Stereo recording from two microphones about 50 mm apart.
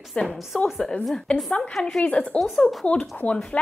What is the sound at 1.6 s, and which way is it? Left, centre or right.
A woman's voice, centre.